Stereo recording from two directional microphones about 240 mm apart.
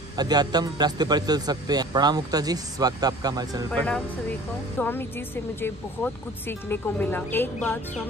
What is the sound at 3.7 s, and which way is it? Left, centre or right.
Speech, centre.